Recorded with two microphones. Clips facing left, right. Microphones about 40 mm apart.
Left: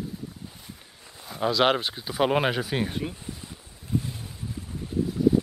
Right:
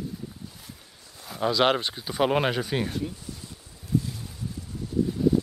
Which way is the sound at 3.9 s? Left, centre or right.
Left.